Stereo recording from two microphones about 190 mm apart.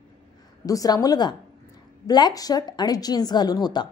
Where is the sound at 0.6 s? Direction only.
20° left (ahead or behind).